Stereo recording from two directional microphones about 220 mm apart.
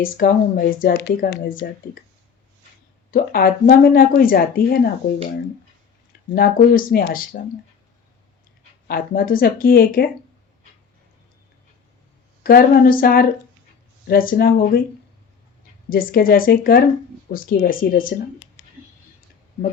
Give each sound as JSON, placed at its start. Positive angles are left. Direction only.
{"t": 0.0, "sound": "speech", "side_deg": 40}
{"t": 3.1, "sound": "speech", "side_deg": 40}
{"t": 6.3, "sound": "speech", "side_deg": 40}
{"t": 8.9, "sound": "speech", "side_deg": 40}
{"t": 12.4, "sound": "speech", "side_deg": 40}
{"t": 15.9, "sound": "speech", "side_deg": 40}
{"t": 18.6, "sound": "a sound", "side_deg": 55}